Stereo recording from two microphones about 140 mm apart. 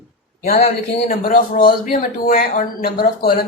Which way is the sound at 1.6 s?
75° left (ahead or behind).